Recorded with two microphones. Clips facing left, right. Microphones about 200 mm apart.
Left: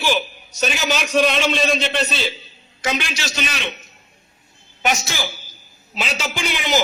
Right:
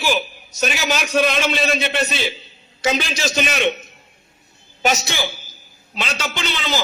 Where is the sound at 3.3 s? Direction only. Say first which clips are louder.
Right 9 dB; 50° right (ahead or behind).